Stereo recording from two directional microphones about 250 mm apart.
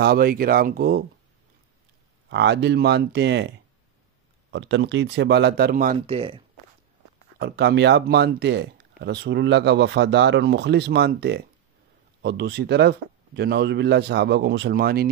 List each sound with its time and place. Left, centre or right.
0.0 s speech: right
2.2 s speech: right
5.9 s speech: right
7.3 s speech: right